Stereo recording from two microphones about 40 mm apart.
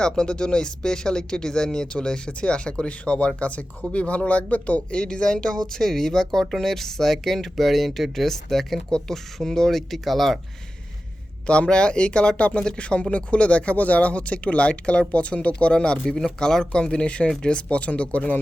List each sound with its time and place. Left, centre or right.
0.0 s speech: left; by 10.3 s centre
11.4 s speech: left
16.4 s speech: centre; by 18.3 s left